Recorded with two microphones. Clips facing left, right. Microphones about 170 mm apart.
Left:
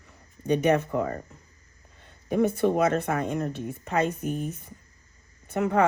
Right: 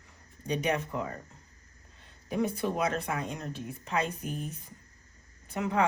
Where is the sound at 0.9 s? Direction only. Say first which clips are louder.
Left 7 dB; 50° left (ahead or behind).